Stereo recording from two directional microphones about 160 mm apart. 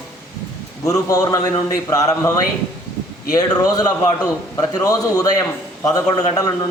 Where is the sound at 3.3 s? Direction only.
25° left (ahead or behind).